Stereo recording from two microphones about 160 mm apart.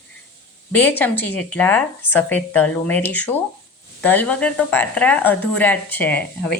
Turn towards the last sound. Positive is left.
turn(degrees=10)  # may be behind; listen again after turning